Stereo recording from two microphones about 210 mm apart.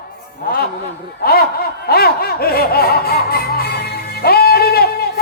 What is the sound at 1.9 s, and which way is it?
Music, 45° left (ahead or behind).